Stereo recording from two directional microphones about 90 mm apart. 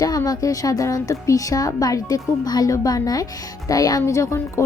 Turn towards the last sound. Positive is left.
turn(degrees=35)  # may be behind; listen again after turning